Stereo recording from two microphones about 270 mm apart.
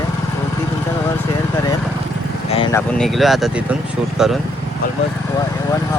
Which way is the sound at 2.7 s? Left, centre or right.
Centre.